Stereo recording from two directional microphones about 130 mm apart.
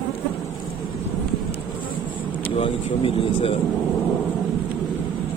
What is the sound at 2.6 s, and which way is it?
Speech, 45° left (ahead or behind).